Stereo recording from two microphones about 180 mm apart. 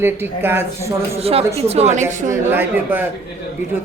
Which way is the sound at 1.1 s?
35° right (ahead or behind).